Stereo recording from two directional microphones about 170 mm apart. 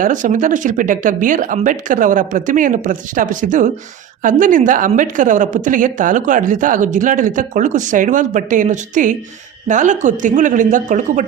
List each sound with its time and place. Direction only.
0.0 s speech: 50° right (ahead or behind)